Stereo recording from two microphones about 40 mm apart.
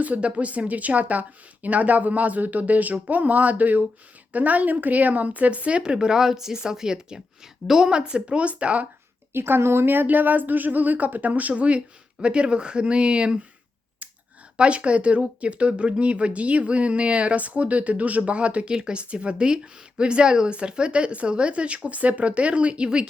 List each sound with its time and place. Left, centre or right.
0.0 s a woman's voice: right; by 7.9 s centre
7.9 s speech: right
9.3 s speech: right
14.5 s speech: right
18.7 s speech: right